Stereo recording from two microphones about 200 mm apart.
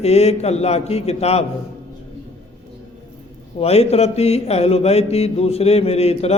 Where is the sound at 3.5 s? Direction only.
30° left (ahead or behind).